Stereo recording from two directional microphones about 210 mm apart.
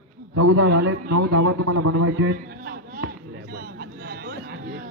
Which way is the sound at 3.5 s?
45° right (ahead or behind).